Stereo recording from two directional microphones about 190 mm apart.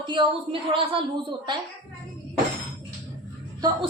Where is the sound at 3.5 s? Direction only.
20° right (ahead or behind).